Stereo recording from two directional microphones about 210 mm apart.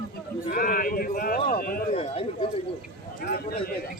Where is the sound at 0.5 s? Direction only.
45° left (ahead or behind).